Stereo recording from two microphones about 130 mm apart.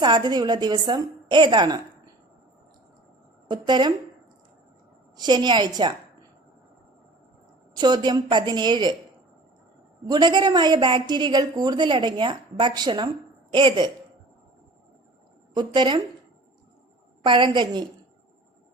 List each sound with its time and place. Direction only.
0.0 s a woman's voice: 35° right (ahead or behind)
3.5 s a woman's voice: 35° right (ahead or behind)
5.1 s a woman's voice: 35° right (ahead or behind)
7.7 s a woman's voice: 35° right (ahead or behind)
10.1 s a woman's voice: 35° right (ahead or behind)
15.5 s a woman's voice: 35° right (ahead or behind)
17.2 s a woman's voice: 35° right (ahead or behind)